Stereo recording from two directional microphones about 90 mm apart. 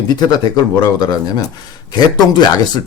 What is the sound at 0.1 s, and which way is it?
Speech, 50° left (ahead or behind).